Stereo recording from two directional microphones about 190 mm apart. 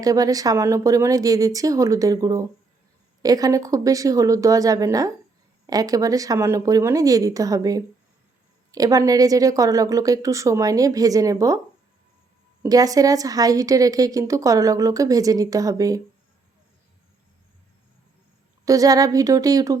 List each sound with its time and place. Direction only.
0.0 s a woman's voice: 20° right (ahead or behind)
12.6 s a woman's voice: 20° right (ahead or behind)
18.6 s speech: 20° right (ahead or behind)